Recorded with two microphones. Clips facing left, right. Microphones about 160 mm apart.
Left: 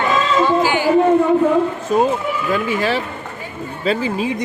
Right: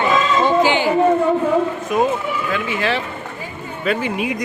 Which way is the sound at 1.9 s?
30° left (ahead or behind).